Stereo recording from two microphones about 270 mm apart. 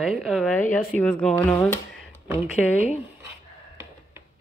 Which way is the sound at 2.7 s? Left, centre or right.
Left.